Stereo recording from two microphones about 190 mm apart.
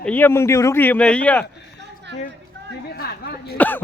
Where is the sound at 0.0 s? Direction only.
10° left (ahead or behind).